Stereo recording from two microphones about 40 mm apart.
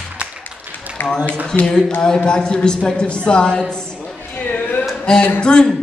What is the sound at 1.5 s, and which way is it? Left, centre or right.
Speech, centre.